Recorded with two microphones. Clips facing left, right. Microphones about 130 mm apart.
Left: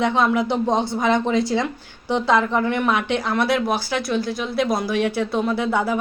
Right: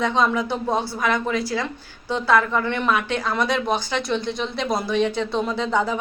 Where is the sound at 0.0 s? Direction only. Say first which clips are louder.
Left 2 dB; 15° left (ahead or behind).